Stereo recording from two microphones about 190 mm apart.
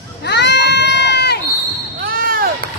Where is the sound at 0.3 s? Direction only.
65° left (ahead or behind).